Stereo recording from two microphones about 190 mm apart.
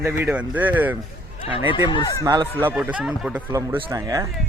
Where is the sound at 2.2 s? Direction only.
20° right (ahead or behind).